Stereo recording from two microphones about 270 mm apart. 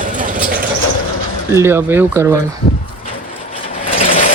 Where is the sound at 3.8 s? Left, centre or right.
Left.